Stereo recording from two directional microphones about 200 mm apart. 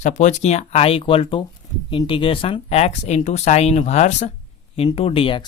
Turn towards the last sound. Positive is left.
turn(degrees=25)  # may be behind; listen again after turning